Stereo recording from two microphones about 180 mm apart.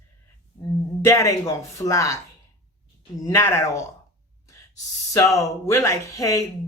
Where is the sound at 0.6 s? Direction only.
20° left (ahead or behind).